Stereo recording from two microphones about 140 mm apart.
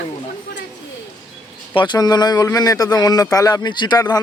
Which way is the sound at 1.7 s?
35° left (ahead or behind).